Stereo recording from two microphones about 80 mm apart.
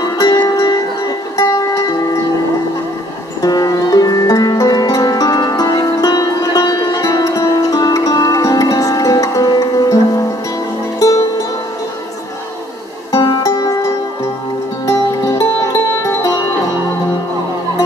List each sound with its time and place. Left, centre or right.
0.0 s music: left
1.3 s music: left
3.4 s music: left
13.1 s music: left
13.4 s music: left
15.3 s music: left